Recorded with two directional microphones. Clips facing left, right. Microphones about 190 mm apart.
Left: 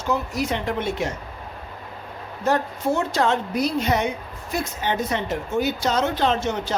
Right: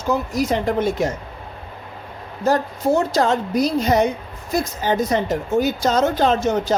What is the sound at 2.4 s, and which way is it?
A woman's voice, 40° right (ahead or behind).